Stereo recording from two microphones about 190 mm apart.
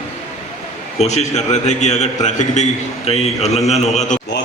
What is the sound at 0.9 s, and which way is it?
A man's voice, 35° left (ahead or behind).